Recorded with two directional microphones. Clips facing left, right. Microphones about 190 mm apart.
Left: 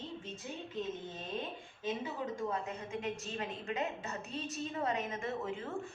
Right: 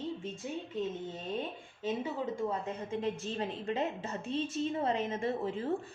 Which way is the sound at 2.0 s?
30° right (ahead or behind).